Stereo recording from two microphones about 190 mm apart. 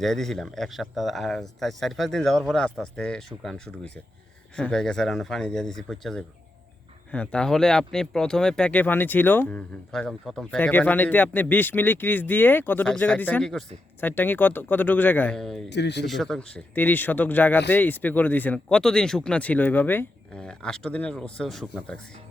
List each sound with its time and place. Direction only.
0.0 s speech: centre (ahead or behind)
15.7 s speech: 65° left (ahead or behind)
16.0 s speech: centre (ahead or behind)